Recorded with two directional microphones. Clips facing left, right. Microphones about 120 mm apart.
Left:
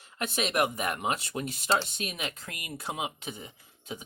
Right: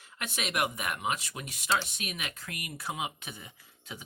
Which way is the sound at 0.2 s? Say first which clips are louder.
Left 4 dB; 30° left (ahead or behind).